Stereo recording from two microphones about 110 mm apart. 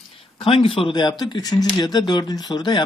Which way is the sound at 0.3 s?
55° left (ahead or behind).